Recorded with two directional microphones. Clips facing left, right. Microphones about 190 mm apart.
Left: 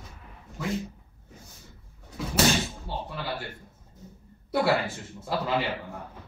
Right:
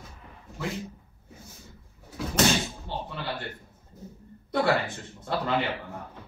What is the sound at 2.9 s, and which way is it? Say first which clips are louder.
Music: right 2 dB; 5° left (ahead or behind).